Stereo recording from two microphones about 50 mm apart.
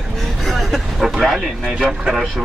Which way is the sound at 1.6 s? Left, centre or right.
Right.